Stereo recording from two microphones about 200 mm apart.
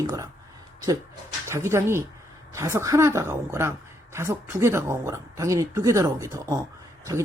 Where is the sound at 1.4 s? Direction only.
15° right (ahead or behind).